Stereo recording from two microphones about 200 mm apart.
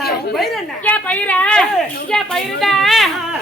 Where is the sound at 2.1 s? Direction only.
Centre (ahead or behind).